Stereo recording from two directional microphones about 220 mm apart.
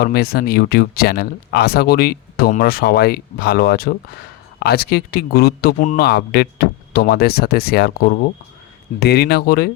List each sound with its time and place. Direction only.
0.0 s speech: 45° left (ahead or behind)